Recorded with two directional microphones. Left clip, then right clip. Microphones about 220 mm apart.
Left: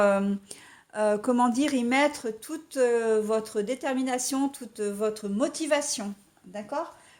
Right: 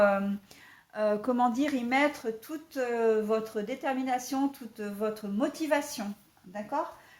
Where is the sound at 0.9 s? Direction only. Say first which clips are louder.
Left 3 dB; 40° left (ahead or behind).